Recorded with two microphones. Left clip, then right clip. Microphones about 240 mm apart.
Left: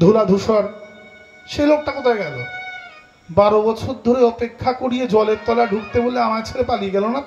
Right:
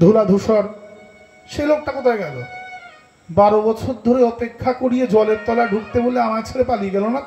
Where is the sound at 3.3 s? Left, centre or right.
Left.